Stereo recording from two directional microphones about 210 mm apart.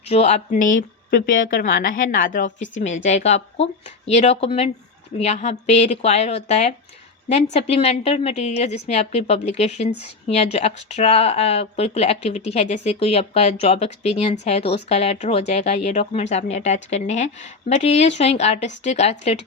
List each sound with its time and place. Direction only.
0.1 s speech: 30° left (ahead or behind)